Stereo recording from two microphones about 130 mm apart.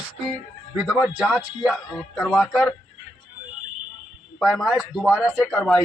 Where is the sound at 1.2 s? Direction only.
Centre (ahead or behind).